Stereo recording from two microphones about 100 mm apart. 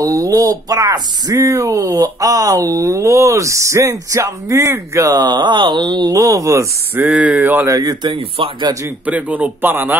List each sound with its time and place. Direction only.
0.0 s speech: 35° right (ahead or behind)
6.1 s speech: 35° right (ahead or behind)
7.0 s speech: 15° right (ahead or behind)
7.6 s speech: 35° right (ahead or behind)
8.0 s speech: 55° right (ahead or behind)
9.0 s speech: 15° right (ahead or behind)